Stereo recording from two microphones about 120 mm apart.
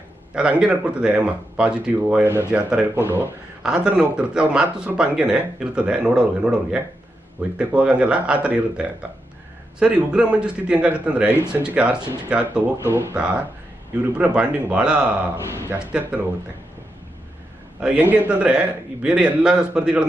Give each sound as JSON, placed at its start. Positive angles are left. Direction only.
{"t": 0.6, "sound": "speech", "side_deg": -10}
{"t": 12.7, "sound": "speech", "side_deg": -20}
{"t": 13.1, "sound": "speech", "side_deg": -10}
{"t": 15.4, "sound": "speech", "side_deg": -20}
{"t": 15.8, "sound": "speech", "side_deg": -10}
{"t": 17.7, "sound": "speech", "side_deg": -10}